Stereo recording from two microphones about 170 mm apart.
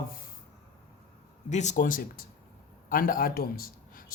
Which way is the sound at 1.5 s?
45° left (ahead or behind).